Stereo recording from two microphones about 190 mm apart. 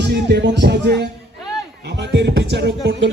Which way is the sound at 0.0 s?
60° right (ahead or behind).